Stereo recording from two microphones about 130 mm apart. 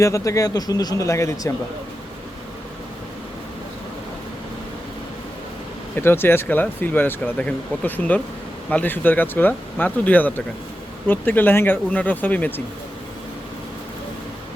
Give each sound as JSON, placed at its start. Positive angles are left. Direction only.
{"t": 0.0, "sound": "speech", "side_deg": 25}
{"t": 6.0, "sound": "speech", "side_deg": 15}